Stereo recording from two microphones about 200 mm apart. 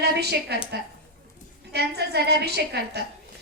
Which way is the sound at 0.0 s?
55° right (ahead or behind).